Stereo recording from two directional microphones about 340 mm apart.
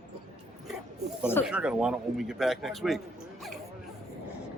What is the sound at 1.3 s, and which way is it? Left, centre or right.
Speech, centre.